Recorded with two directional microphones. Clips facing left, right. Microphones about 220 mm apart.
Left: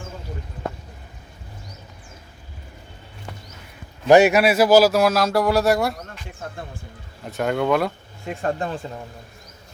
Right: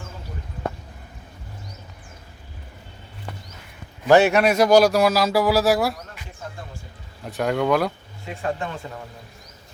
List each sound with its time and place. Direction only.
4.1 s speech: 10° left (ahead or behind)
7.3 s speech: centre (ahead or behind)
8.3 s speech: 40° left (ahead or behind)